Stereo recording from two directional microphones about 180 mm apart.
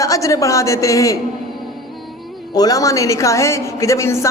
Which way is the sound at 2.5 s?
20° left (ahead or behind).